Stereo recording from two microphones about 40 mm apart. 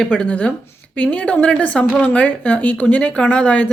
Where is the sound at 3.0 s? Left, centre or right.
Left.